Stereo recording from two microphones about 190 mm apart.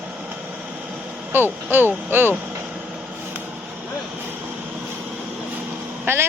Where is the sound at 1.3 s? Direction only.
10° right (ahead or behind).